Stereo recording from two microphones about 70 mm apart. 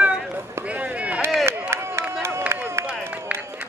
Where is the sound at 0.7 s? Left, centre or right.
Centre.